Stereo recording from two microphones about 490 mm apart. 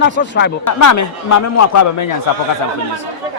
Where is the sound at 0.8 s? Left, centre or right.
Left.